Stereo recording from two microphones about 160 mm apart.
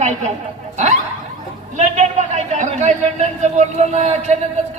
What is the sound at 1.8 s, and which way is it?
A man's voice, 45° right (ahead or behind).